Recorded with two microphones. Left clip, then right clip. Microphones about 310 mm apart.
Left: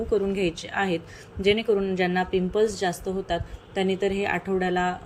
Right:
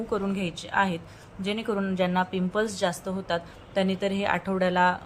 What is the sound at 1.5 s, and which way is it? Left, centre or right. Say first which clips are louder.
Speech: left 7 dB; right.